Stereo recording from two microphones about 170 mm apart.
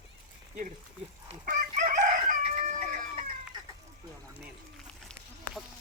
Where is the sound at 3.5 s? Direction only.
25° right (ahead or behind).